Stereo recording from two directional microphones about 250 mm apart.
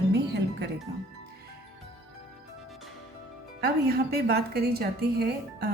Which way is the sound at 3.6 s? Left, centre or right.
Right.